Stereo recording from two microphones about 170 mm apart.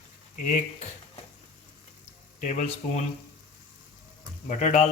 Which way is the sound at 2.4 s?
45° left (ahead or behind).